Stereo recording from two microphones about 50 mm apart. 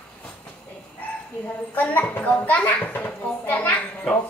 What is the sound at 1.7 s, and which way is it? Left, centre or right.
A child's voice, left.